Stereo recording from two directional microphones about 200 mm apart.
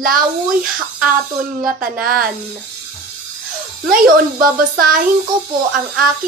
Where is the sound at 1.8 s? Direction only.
45° right (ahead or behind).